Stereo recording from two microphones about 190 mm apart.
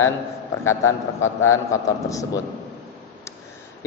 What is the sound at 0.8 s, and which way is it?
Speech, 90° left.